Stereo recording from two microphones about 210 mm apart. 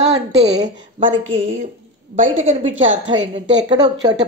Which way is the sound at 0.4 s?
30° right (ahead or behind).